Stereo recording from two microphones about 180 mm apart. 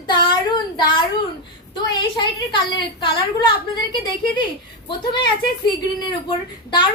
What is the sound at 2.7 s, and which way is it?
Speech, 25° left (ahead or behind).